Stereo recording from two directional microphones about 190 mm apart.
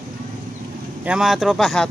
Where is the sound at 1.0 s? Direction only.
5° right (ahead or behind).